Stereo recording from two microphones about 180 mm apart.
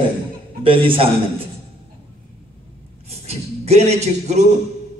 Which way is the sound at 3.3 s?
35° right (ahead or behind).